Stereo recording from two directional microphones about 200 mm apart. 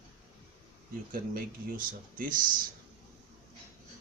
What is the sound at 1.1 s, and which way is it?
Speech, 45° right (ahead or behind).